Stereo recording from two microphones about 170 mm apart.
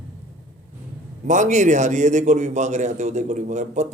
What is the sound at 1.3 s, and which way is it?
A man's voice, 45° right (ahead or behind).